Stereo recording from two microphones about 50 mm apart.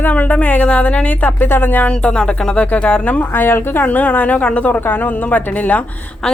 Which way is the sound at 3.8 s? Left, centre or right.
Left.